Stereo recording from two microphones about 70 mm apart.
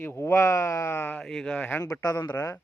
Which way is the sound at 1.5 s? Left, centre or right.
Left.